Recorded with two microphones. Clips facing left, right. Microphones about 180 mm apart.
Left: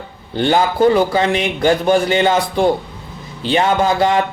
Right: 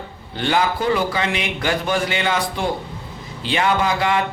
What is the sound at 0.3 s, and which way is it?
Speech, 40° left (ahead or behind).